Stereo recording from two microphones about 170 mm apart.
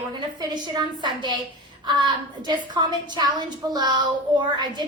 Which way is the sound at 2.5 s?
25° right (ahead or behind).